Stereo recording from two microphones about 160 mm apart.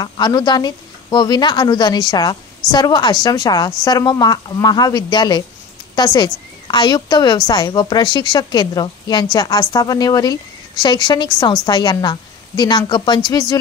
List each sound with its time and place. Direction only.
0.0 s a woman's voice: 25° left (ahead or behind)